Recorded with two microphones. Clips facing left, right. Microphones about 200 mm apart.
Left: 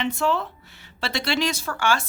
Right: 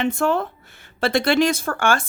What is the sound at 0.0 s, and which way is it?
A woman's voice, 50° right (ahead or behind).